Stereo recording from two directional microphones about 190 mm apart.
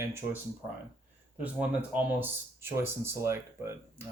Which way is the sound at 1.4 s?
5° right (ahead or behind).